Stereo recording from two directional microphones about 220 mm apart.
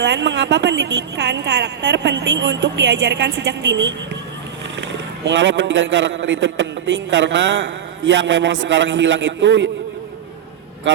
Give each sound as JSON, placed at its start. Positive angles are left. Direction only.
{"t": 0.0, "sound": "a woman's voice", "side_deg": -55}